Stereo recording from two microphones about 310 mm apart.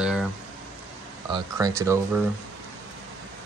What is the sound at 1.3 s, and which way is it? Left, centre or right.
Speech, centre.